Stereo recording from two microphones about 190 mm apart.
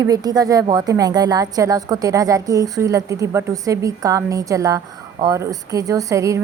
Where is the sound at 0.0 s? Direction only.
20° right (ahead or behind).